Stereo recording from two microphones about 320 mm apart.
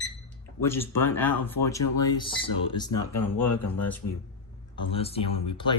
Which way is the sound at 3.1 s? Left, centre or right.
Left.